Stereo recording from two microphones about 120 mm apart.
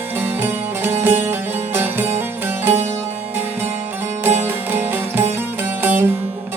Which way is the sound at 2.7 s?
70° right (ahead or behind).